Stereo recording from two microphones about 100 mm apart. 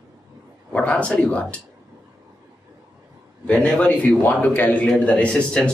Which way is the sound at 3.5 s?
15° left (ahead or behind).